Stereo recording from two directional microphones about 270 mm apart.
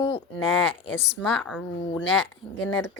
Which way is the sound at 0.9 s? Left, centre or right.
Left.